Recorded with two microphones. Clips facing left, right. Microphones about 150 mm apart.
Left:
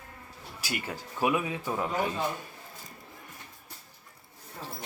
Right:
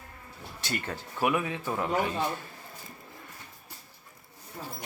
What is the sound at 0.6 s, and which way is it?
A man's voice, 10° left (ahead or behind).